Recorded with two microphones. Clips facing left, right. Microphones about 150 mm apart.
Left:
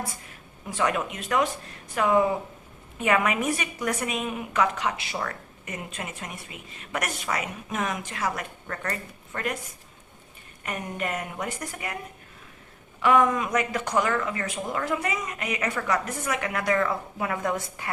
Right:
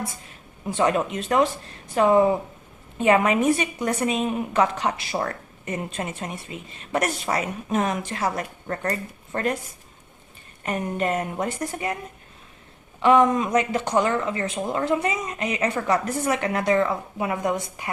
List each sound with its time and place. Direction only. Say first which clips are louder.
0.3 s a woman's voice: right 7 dB; 25° right (ahead or behind)
10.6 s a woman's voice: right 6 dB; 30° right (ahead or behind)
13.0 s speech: right 4 dB; 25° right (ahead or behind)